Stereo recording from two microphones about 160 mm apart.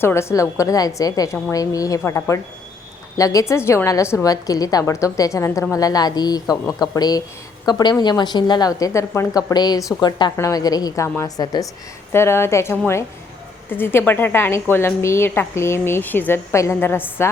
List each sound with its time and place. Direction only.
0.0 s a woman's voice: 15° left (ahead or behind)